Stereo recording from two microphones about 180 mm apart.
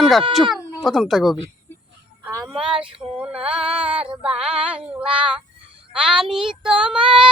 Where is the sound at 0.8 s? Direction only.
Centre (ahead or behind).